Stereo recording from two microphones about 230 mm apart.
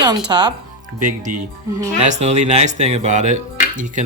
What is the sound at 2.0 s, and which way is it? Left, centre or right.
Speech, right.